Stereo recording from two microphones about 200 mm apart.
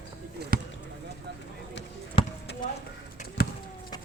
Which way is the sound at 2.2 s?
25° left (ahead or behind).